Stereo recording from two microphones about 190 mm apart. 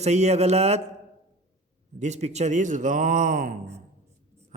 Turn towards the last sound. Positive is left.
turn(degrees=-45)  # may be behind; listen again after turning